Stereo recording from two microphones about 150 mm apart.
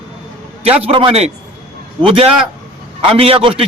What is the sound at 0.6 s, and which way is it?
A man's voice, 40° right (ahead or behind).